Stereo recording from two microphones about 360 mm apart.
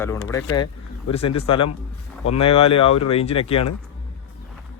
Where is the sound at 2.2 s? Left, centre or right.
Left.